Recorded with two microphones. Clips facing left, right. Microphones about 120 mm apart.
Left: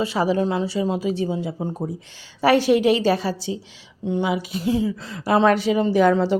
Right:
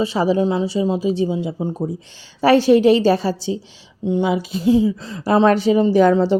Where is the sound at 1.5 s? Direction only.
15° left (ahead or behind).